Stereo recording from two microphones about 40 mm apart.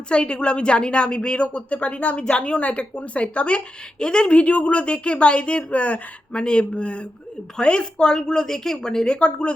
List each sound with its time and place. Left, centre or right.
0.1 s a woman's voice: left
4.4 s a woman's voice: left
6.3 s a woman's voice: left